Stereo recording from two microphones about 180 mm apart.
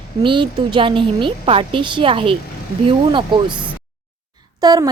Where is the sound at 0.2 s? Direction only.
25° right (ahead or behind).